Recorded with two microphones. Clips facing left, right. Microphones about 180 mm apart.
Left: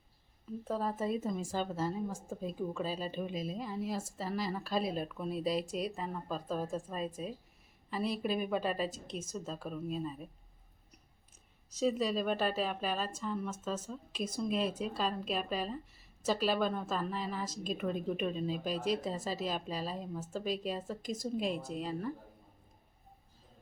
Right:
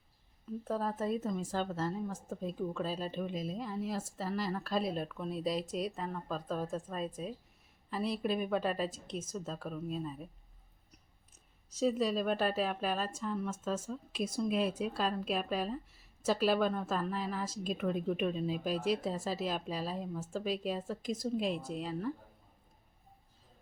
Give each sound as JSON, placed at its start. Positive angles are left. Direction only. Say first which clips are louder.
{"t": 0.6, "sound": "speech", "louder": "even", "side_deg": 0}
{"t": 11.8, "sound": "speech", "louder": "right 1 dB", "side_deg": 0}